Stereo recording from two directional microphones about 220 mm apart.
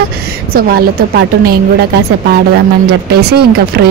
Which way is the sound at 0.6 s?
45° right (ahead or behind).